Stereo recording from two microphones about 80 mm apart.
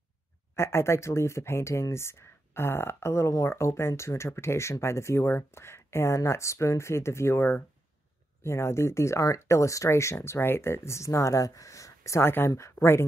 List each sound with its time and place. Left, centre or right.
0.6 s speech: left
12.7 s speech: left